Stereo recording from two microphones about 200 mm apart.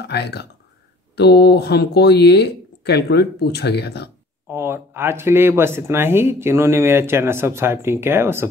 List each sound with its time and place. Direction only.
0.0 s speech: 55° left (ahead or behind)
4.5 s speech: 10° right (ahead or behind)